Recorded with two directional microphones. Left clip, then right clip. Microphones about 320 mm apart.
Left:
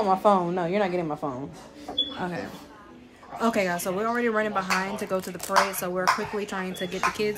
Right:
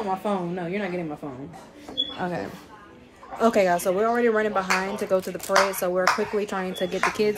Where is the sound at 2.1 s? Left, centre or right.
Centre.